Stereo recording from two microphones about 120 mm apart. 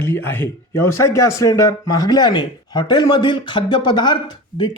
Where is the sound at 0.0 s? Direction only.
15° left (ahead or behind).